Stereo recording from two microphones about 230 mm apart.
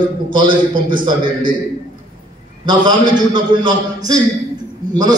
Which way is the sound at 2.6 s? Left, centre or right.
Centre.